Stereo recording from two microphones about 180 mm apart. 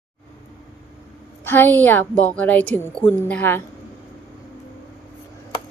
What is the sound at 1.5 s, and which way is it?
A woman's voice, 10° left (ahead or behind).